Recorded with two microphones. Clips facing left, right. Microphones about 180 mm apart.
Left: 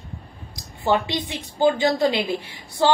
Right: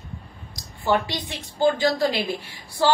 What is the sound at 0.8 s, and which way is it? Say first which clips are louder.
A woman's voice: left 1 dB; 20° left (ahead or behind).